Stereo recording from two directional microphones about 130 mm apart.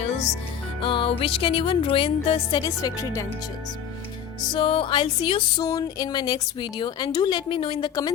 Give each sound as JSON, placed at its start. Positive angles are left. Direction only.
{"t": 0.8, "sound": "music", "side_deg": 40}
{"t": 2.6, "sound": "speech", "side_deg": 30}
{"t": 4.4, "sound": "a woman's voice", "side_deg": 40}
{"t": 5.6, "sound": "a woman's voice", "side_deg": 30}